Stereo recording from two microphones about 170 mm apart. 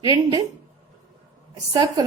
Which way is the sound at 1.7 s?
20° right (ahead or behind).